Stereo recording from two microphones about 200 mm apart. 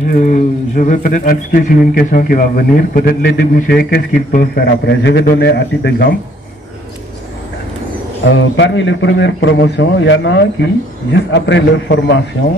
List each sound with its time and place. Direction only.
0.1 s speech: 40° left (ahead or behind)
8.5 s a man's voice: 65° left (ahead or behind)